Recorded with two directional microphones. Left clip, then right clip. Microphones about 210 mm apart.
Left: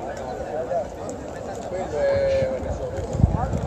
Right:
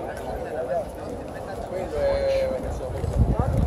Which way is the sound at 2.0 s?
35° right (ahead or behind).